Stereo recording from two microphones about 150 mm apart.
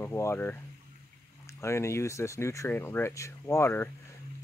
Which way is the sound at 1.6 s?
20° left (ahead or behind).